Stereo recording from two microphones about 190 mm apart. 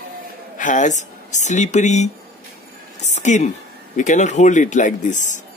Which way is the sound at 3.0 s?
35° left (ahead or behind).